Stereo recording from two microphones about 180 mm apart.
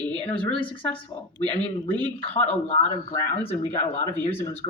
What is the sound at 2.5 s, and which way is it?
Speech, 35° left (ahead or behind).